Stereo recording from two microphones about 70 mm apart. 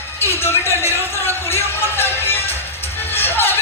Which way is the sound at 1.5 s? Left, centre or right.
Left.